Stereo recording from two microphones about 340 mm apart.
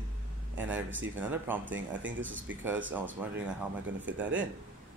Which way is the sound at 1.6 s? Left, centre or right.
Right.